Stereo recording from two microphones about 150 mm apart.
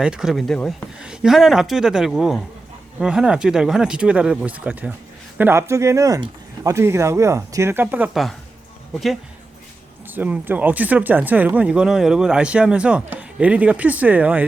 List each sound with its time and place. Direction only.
0.0 s speech: 5° right (ahead or behind)
10.2 s speech: 10° right (ahead or behind)